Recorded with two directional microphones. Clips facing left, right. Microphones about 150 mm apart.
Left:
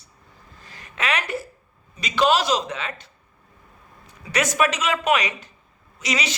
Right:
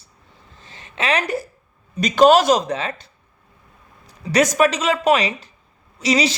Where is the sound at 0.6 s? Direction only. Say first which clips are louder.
Right 3 dB; 25° right (ahead or behind).